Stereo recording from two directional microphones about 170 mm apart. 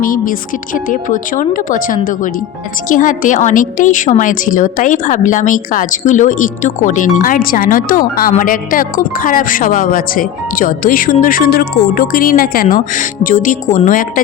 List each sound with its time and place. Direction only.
0.0 s speech: 55° left (ahead or behind)